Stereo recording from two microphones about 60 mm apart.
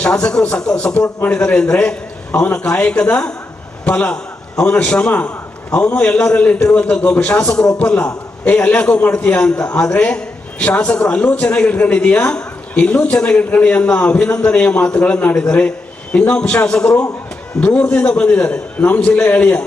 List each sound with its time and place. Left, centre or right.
0.0 s a man's voice: centre
6.7 s a man's voice: centre